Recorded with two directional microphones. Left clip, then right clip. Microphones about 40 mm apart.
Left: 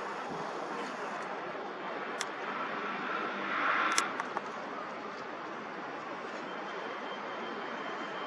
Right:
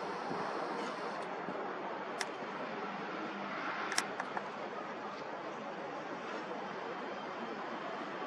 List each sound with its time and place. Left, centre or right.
3.5 s vehicle: left